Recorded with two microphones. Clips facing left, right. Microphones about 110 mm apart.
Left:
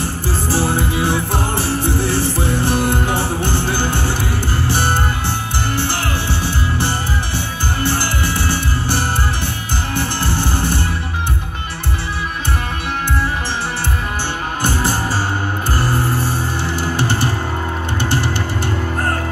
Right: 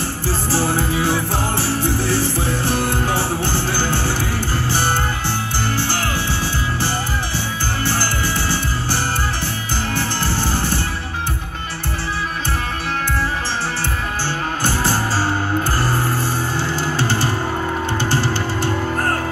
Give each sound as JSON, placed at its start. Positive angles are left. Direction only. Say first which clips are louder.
{"t": 0.6, "sound": "music", "louder": "left 1 dB", "side_deg": 20}
{"t": 7.8, "sound": "music", "louder": "left 2 dB", "side_deg": 25}
{"t": 10.5, "sound": "music", "louder": "left 1 dB", "side_deg": 60}
{"t": 14.6, "sound": "music", "louder": "left 2 dB", "side_deg": 55}
{"t": 16.7, "sound": "music", "louder": "left 2 dB", "side_deg": 55}